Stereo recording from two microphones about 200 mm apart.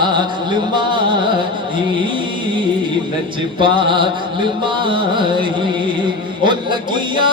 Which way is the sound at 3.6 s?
25° right (ahead or behind).